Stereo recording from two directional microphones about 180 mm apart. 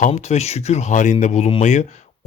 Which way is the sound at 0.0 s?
40° left (ahead or behind).